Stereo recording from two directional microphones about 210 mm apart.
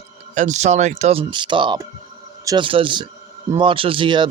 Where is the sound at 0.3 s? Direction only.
35° right (ahead or behind).